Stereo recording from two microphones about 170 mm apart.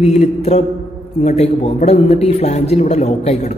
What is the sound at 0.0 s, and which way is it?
A man's voice, 40° left (ahead or behind).